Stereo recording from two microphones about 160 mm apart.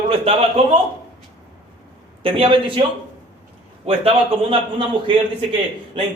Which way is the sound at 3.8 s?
35° right (ahead or behind).